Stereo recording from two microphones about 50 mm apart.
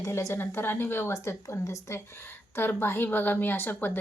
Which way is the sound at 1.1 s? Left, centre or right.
Left.